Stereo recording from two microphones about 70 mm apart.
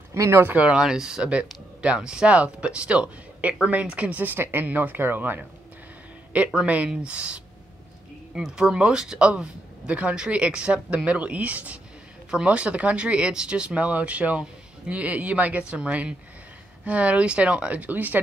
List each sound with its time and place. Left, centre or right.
0.1 s speech: right
0.5 s speech: centre
6.3 s speech: centre